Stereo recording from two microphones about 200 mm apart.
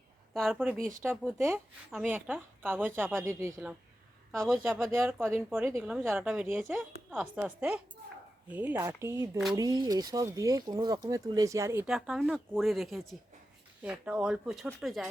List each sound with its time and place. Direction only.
0.3 s speech: centre (ahead or behind)
0.9 s speech: 10° right (ahead or behind)
4.9 s speech: 10° right (ahead or behind)
11.9 s speech: centre (ahead or behind)